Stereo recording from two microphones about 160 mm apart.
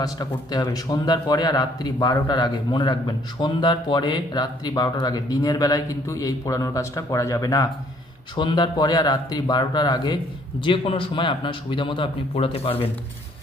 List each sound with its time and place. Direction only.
0.0 s a man's voice: 25° left (ahead or behind)